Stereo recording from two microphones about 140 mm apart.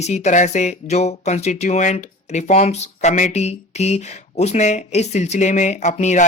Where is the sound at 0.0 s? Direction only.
55° left (ahead or behind).